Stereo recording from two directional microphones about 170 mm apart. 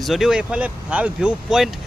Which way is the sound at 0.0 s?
Centre (ahead or behind).